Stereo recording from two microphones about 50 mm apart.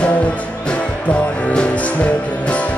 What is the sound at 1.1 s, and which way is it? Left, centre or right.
Music, centre.